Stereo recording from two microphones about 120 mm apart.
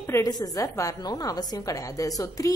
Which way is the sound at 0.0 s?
20° left (ahead or behind).